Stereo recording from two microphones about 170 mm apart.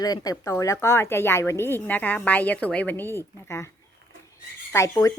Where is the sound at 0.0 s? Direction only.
20° left (ahead or behind).